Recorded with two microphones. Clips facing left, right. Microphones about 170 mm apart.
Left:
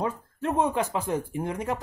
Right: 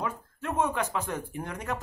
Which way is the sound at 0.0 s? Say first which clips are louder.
Left 5 dB; 35° left (ahead or behind).